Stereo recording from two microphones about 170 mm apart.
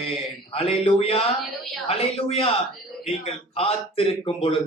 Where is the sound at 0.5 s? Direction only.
35° left (ahead or behind).